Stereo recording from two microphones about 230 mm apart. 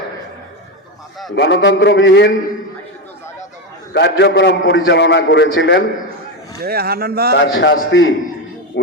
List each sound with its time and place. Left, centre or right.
1.4 s a man's voice: left
3.9 s a man's voice: left
6.6 s speech: right
7.3 s a man's voice: left